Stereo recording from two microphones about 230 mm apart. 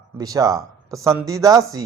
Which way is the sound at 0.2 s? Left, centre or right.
Centre.